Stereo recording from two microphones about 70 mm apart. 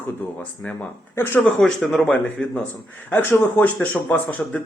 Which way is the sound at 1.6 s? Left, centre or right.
Centre.